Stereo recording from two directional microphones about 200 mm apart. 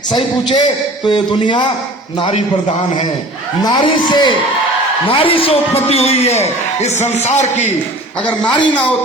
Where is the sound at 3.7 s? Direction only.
20° left (ahead or behind).